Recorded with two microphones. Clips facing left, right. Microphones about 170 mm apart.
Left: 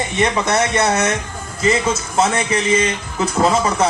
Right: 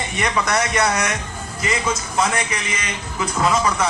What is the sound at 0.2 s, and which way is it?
A man's voice, 25° left (ahead or behind).